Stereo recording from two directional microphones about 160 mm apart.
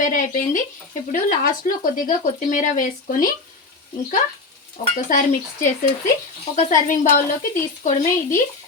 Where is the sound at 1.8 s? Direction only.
55° left (ahead or behind).